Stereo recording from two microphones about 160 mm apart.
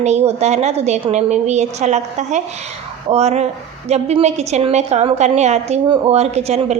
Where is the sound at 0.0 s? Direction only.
45° right (ahead or behind).